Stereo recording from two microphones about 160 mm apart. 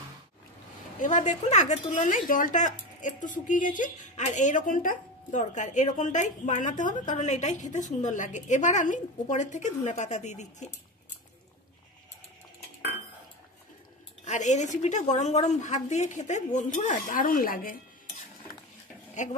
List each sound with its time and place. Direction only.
0.9 s a woman's voice: 50° left (ahead or behind)
14.2 s a woman's voice: 50° left (ahead or behind)